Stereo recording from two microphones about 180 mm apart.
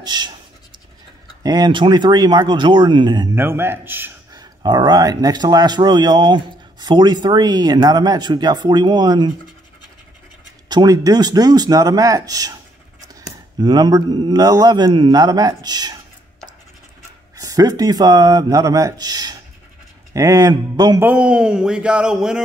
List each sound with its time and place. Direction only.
0.0 s speech: 25° right (ahead or behind)
1.4 s speech: 25° right (ahead or behind)
3.3 s a man's voice: 10° right (ahead or behind)
4.3 s speech: 25° right (ahead or behind)
10.7 s speech: 20° right (ahead or behind)
17.4 s speech: 20° right (ahead or behind)
21.0 s speech: 5° right (ahead or behind)